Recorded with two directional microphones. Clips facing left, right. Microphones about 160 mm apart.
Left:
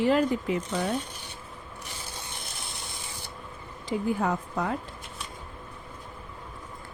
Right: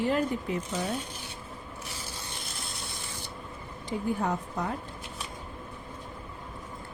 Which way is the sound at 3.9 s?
90° left.